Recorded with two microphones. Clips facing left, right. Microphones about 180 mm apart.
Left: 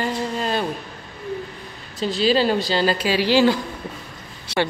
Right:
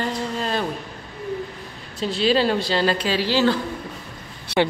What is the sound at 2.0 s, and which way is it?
A woman's voice, centre (ahead or behind).